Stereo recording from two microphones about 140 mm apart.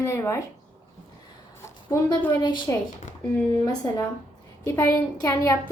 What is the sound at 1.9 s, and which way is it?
Speech, 20° left (ahead or behind).